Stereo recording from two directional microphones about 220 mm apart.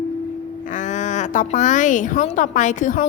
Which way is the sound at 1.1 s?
35° left (ahead or behind).